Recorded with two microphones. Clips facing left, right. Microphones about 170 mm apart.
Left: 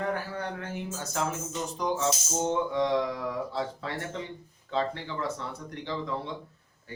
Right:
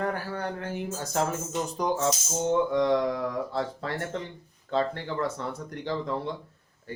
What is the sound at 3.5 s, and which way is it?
Speech, 50° right (ahead or behind).